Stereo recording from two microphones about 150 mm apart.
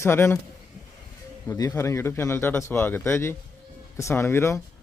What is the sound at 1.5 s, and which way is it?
Speech, 20° left (ahead or behind).